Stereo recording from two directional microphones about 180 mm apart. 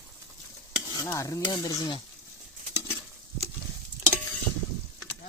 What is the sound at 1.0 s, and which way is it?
Speech, 15° left (ahead or behind).